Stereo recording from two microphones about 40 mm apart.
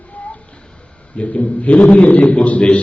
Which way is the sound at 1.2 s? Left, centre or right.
Left.